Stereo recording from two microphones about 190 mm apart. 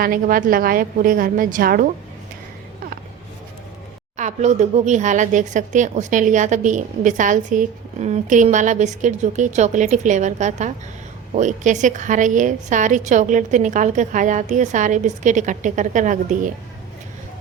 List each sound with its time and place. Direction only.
0.0 s a woman's voice: 50° right (ahead or behind)
4.2 s speech: 40° right (ahead or behind)